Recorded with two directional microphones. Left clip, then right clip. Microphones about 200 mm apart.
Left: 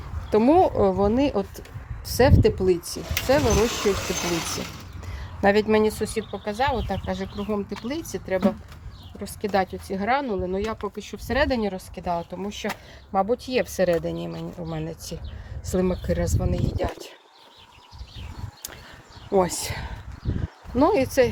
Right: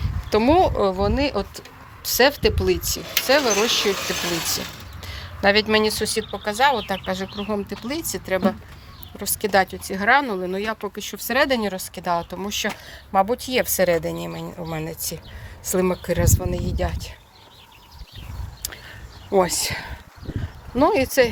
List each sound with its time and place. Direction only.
0.3 s speech: 20° left (ahead or behind)
0.8 s speech: 35° left (ahead or behind)
4.3 s speech: 5° left (ahead or behind)
5.0 s speech: 25° left (ahead or behind)
19.3 s speech: 15° left (ahead or behind)